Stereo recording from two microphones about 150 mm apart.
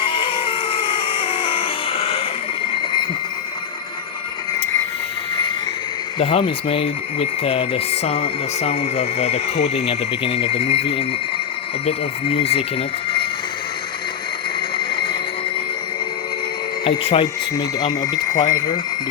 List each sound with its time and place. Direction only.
0.0 s a sound: 35° left (ahead or behind)
6.1 s speech: 40° left (ahead or behind)
11.9 s speech: 40° left (ahead or behind)
14.8 s a sound: 35° left (ahead or behind)
16.8 s speech: 40° left (ahead or behind)
17.6 s speech: 25° left (ahead or behind)